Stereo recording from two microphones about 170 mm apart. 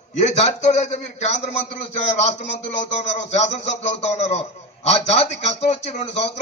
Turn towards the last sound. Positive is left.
turn(degrees=40)  # may be behind; listen again after turning